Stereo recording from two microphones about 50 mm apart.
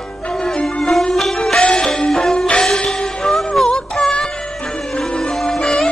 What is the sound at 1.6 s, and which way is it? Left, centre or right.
Music, centre.